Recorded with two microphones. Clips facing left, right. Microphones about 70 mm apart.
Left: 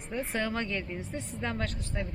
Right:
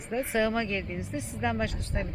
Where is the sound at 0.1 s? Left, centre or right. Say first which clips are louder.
Right 5 dB; centre.